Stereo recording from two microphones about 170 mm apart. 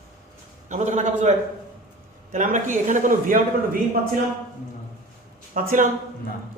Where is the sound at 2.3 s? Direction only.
45° right (ahead or behind).